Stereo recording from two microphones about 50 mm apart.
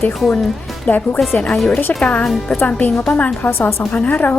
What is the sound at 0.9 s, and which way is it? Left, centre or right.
A woman's voice, left.